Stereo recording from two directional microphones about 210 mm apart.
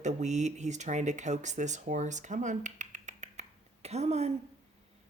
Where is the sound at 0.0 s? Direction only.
35° right (ahead or behind).